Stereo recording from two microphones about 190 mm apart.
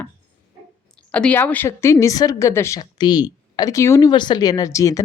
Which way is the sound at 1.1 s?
5° left (ahead or behind).